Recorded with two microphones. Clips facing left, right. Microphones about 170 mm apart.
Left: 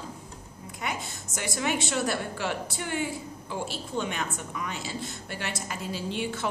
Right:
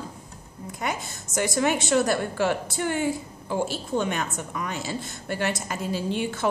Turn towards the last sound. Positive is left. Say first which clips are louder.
# right 5 dB
turn(degrees=-45)  # may be behind; listen again after turning